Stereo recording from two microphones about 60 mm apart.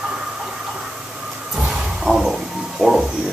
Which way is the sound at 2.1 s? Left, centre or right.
Centre.